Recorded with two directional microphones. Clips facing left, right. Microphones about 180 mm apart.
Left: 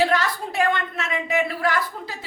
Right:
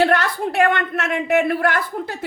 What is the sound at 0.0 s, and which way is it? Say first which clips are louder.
A woman's voice: right 4 dB; 60° right (ahead or behind).